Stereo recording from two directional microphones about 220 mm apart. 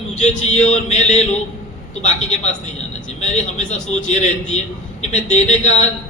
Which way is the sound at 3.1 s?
30° left (ahead or behind).